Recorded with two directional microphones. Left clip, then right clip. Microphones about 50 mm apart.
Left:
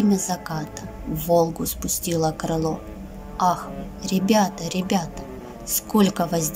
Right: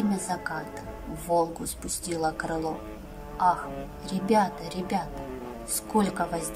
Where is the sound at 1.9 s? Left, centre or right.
Left.